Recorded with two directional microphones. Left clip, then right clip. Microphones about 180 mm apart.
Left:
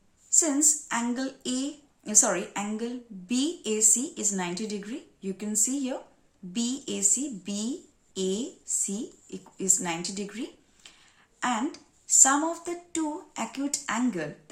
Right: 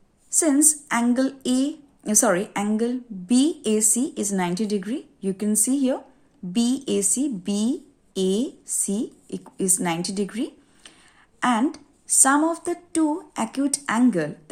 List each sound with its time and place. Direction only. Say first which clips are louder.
0.3 s a woman's voice: right 4 dB; 40° right (ahead or behind)